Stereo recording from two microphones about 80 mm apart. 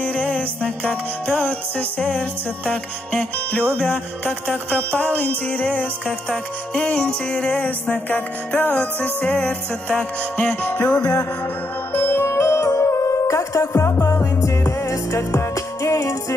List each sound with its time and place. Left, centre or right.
0.0 s music: centre
11.9 s music: left